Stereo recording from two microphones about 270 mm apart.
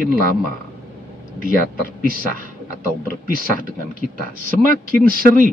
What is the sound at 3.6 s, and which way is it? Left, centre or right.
Speech, right.